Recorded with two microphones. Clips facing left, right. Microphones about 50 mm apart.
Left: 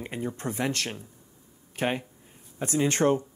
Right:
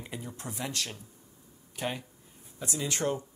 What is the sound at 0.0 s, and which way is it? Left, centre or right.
Speech, left.